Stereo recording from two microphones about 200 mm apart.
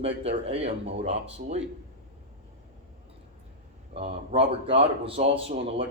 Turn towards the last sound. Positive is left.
turn(degrees=-30)  # may be behind; listen again after turning